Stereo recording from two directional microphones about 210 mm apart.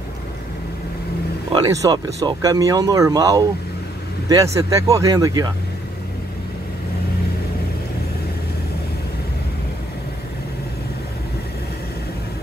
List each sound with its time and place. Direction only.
1.5 s speech: 15° right (ahead or behind)